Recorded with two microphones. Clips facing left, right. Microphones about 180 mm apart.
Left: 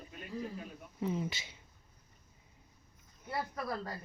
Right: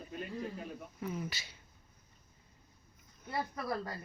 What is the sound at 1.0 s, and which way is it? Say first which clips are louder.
Speech: left 5 dB; 25° left (ahead or behind).